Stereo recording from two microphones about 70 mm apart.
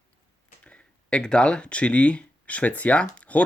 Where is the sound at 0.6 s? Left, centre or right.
Centre.